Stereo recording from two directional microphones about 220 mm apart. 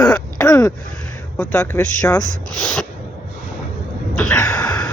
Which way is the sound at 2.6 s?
Centre (ahead or behind).